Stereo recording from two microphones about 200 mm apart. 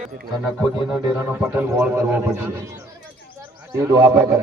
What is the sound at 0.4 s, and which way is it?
Speech, 5° right (ahead or behind).